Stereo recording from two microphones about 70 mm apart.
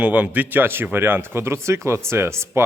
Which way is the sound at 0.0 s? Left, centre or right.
Right.